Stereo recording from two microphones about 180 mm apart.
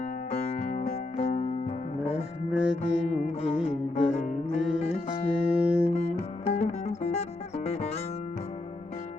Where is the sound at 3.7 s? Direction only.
40° left (ahead or behind).